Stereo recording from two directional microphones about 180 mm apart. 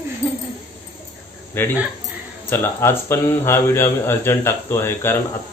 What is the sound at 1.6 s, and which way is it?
A man's voice, 10° left (ahead or behind).